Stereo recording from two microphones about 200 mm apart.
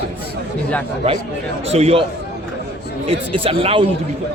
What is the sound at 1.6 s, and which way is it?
Speech, 30° right (ahead or behind).